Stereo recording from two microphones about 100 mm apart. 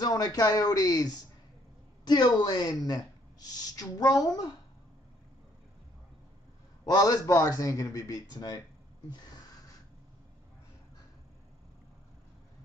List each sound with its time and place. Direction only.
0.0 s a man's voice: 40° left (ahead or behind)
6.9 s a man's voice: 40° left (ahead or behind)